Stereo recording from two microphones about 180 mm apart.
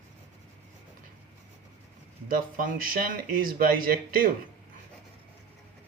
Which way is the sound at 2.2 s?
50° right (ahead or behind).